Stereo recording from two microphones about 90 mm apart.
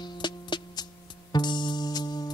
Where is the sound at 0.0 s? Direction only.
55° left (ahead or behind).